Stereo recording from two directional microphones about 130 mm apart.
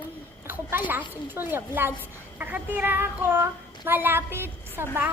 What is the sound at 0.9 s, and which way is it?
Child singing, 15° right (ahead or behind).